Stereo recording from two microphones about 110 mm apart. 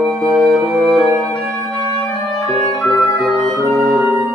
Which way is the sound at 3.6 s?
30° right (ahead or behind).